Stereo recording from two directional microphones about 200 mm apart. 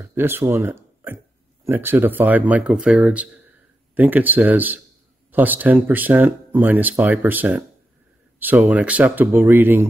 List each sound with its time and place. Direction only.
0.0 s speech: 10° right (ahead or behind)